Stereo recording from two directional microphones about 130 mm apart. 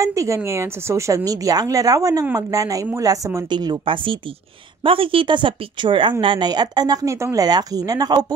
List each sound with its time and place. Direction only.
0.0 s a woman's voice: 25° right (ahead or behind)